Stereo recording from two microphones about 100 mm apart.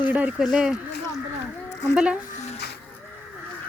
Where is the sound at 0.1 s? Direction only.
15° right (ahead or behind).